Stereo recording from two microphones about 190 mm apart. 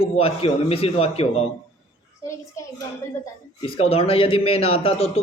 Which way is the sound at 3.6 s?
30° left (ahead or behind).